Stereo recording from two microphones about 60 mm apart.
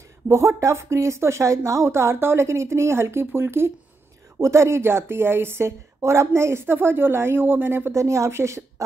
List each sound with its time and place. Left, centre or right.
0.3 s speech: right
4.4 s speech: right
7.9 s a woman's voice: right